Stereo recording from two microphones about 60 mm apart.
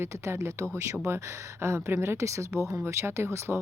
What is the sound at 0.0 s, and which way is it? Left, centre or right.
Speech, right.